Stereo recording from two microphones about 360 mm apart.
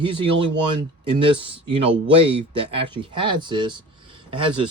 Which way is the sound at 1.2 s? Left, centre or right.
Centre.